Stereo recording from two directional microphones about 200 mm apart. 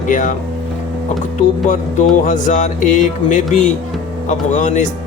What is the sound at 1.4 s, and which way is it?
Speech, 35° left (ahead or behind).